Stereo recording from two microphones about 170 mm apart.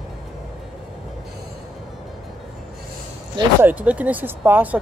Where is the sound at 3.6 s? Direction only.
10° right (ahead or behind).